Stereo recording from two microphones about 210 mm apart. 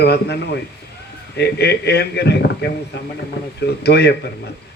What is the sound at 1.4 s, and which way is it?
A man's voice, 50° left (ahead or behind).